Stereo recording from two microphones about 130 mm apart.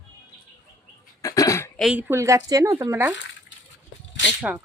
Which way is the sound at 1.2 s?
25° left (ahead or behind).